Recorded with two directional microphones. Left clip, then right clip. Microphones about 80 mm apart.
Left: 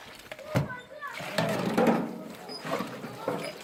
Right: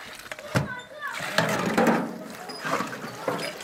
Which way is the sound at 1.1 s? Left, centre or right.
Centre.